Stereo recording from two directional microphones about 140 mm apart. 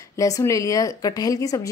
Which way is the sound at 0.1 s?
20° left (ahead or behind).